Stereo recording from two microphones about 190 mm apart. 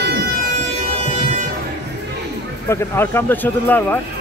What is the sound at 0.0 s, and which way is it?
Music, 60° right (ahead or behind).